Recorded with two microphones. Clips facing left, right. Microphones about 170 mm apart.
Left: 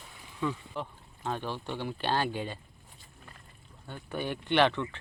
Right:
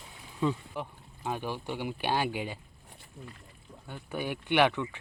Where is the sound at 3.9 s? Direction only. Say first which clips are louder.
Even; 10° right (ahead or behind).